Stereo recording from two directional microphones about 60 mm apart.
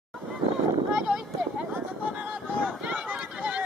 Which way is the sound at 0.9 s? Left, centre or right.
Centre.